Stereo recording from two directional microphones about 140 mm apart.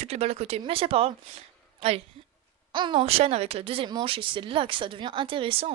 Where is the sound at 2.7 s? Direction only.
35° right (ahead or behind).